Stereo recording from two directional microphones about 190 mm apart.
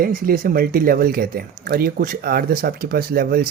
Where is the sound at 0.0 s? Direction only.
50° right (ahead or behind).